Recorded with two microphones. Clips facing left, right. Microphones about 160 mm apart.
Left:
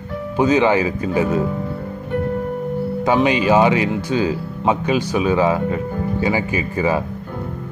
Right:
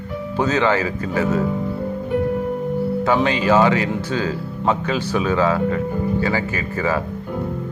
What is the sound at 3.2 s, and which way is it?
Speech, 15° left (ahead or behind).